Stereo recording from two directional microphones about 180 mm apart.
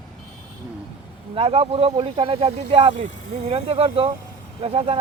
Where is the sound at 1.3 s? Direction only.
30° right (ahead or behind).